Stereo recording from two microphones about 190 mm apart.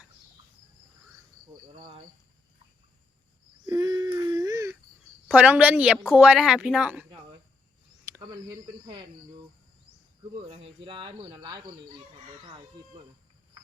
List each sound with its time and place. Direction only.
1.7 s speech: 30° right (ahead or behind)
3.7 s a sound: 20° right (ahead or behind)
5.3 s a woman's voice: 5° right (ahead or behind)
8.0 s speech: 15° right (ahead or behind)
10.4 s speech: 30° right (ahead or behind)